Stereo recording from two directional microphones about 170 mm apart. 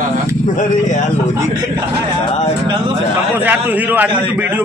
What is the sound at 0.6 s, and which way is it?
Speech, 45° left (ahead or behind).